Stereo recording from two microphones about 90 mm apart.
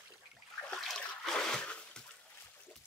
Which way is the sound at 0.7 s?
5° left (ahead or behind).